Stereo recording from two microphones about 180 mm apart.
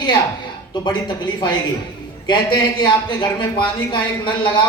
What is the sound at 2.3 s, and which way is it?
Speech, 25° left (ahead or behind).